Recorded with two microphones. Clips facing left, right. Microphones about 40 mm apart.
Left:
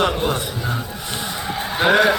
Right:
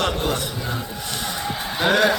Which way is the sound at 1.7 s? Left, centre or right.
Centre.